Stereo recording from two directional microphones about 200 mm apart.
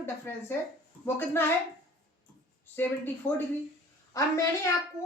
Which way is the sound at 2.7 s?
10° left (ahead or behind).